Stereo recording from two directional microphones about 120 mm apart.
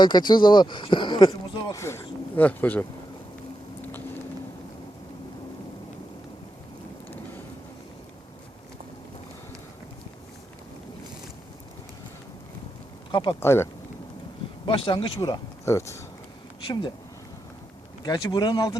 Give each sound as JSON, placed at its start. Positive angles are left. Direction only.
{"t": 0.0, "sound": "speech", "side_deg": 40}
{"t": 13.1, "sound": "a sound", "side_deg": 40}
{"t": 13.4, "sound": "speech", "side_deg": 20}
{"t": 14.8, "sound": "speech", "side_deg": 40}
{"t": 15.2, "sound": "speech", "side_deg": 25}
{"t": 18.0, "sound": "speech", "side_deg": 35}